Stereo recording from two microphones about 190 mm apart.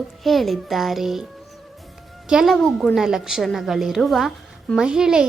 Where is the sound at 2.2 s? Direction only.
Centre (ahead or behind).